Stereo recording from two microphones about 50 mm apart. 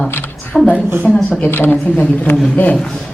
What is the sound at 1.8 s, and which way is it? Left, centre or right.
Speech, left.